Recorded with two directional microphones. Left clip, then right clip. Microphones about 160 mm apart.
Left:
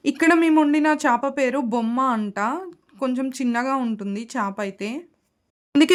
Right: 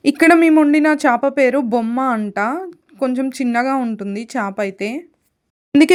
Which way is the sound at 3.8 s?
15° right (ahead or behind).